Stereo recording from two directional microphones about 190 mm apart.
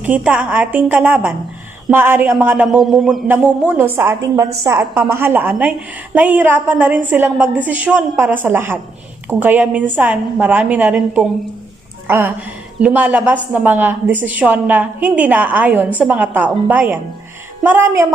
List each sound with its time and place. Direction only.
0.0 s a woman's voice: 5° right (ahead or behind)